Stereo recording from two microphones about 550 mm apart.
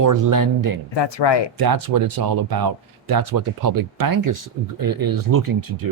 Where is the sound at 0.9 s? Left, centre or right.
Left.